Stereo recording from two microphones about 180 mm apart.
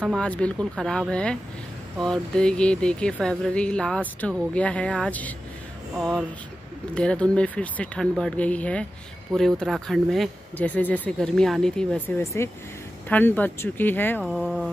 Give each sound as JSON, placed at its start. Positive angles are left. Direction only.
{"t": 0.2, "sound": "speech", "side_deg": 5}
{"t": 12.2, "sound": "speech", "side_deg": 15}
{"t": 14.2, "sound": "speech", "side_deg": -5}